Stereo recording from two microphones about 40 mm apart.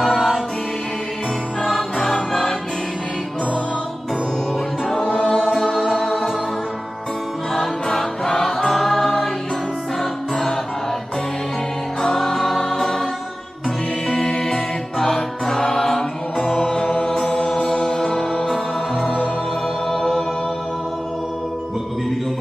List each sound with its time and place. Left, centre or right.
0.0 s music: centre
1.6 s music: centre
5.3 s music: centre
7.5 s music: centre
12.0 s music: centre
16.3 s music: left
16.9 s chant: centre
17.6 s music: left
19.9 s music: centre